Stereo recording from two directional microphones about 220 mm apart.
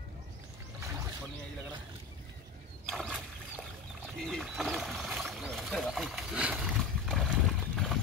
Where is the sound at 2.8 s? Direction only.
Centre (ahead or behind).